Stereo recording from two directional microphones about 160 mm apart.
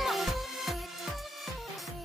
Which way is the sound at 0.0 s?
Centre (ahead or behind).